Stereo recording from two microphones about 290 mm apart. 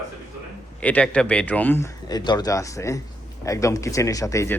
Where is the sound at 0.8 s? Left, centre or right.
Centre.